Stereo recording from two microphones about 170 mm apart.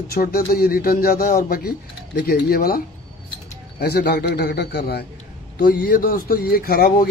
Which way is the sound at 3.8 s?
70° left (ahead or behind).